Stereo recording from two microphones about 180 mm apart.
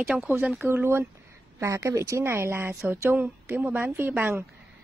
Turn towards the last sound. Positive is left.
turn(degrees=-10)  # may be behind; listen again after turning